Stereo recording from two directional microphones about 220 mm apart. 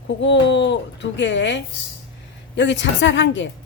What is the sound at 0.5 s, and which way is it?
A woman's voice, 55° left (ahead or behind).